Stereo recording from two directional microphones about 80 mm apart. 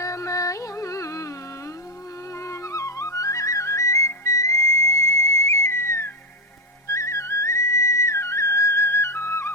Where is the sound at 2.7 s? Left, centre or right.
Left.